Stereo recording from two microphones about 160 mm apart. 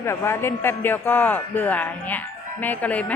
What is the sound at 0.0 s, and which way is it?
A man's voice, 15° left (ahead or behind).